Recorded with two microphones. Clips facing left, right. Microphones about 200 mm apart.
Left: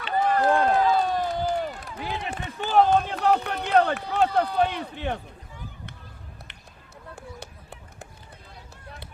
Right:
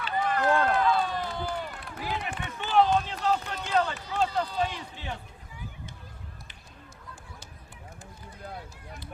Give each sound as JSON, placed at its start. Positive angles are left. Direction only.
{"t": 0.3, "sound": "run", "side_deg": 35}
{"t": 2.0, "sound": "run", "side_deg": 25}
{"t": 2.6, "sound": "run", "side_deg": 45}
{"t": 7.2, "sound": "run", "side_deg": 60}